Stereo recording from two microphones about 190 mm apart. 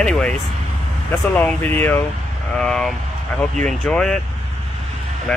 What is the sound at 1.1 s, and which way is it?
Speech, 5° left (ahead or behind).